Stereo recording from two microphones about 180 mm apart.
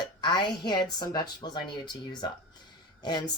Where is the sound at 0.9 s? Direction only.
25° left (ahead or behind).